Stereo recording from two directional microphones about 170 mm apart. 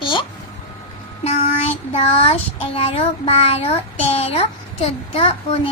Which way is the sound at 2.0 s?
35° left (ahead or behind).